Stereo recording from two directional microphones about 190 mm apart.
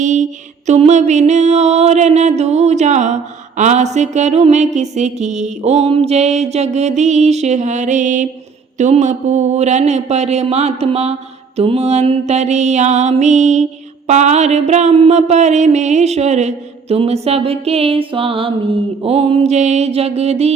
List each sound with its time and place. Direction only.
0.0 s lullaby: 40° right (ahead or behind)
0.7 s music: 35° right (ahead or behind)